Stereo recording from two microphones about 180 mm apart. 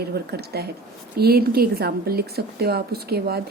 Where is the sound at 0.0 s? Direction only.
60° right (ahead or behind).